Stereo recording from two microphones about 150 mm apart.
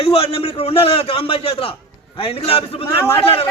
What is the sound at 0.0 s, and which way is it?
A man's voice, 40° left (ahead or behind).